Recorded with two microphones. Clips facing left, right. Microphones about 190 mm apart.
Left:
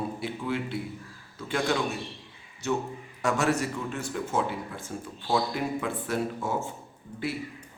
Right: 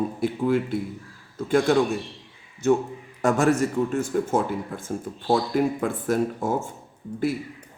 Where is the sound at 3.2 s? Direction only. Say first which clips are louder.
Right 6 dB; 50° right (ahead or behind).